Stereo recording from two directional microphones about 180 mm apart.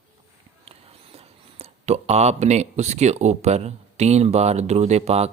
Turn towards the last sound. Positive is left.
turn(degrees=-35)  # may be behind; listen again after turning